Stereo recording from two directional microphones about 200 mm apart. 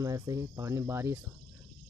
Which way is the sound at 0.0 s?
15° right (ahead or behind).